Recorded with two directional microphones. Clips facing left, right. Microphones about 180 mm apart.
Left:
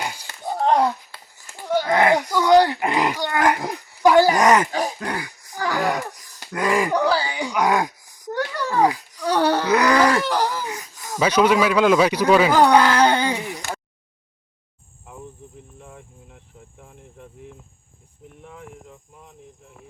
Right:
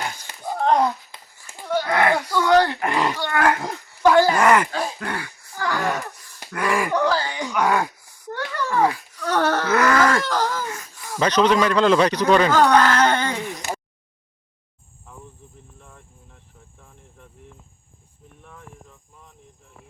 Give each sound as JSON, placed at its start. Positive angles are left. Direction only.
{"t": 0.0, "sound": "wheeze", "side_deg": 10}
{"t": 1.6, "sound": "a sound", "side_deg": 20}
{"t": 11.2, "sound": "speech", "side_deg": 10}
{"t": 15.8, "sound": "cricket", "side_deg": 15}
{"t": 18.4, "sound": "cricket", "side_deg": 15}